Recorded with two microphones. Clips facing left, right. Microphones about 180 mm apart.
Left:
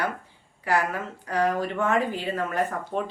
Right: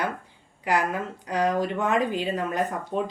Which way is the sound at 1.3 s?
15° right (ahead or behind).